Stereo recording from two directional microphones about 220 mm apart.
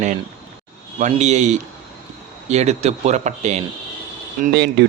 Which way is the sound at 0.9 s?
30° right (ahead or behind).